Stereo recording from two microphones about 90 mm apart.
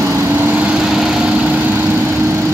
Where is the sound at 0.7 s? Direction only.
5° right (ahead or behind).